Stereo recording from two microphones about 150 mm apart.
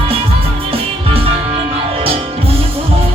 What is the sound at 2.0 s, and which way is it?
Music, 40° right (ahead or behind).